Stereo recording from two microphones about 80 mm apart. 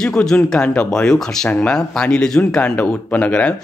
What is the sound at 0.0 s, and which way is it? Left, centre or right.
Speech, centre.